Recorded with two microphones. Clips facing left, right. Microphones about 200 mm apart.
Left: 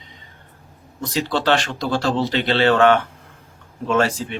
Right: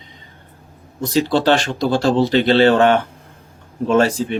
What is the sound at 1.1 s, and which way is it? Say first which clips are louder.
Speech: right 4 dB; 35° right (ahead or behind).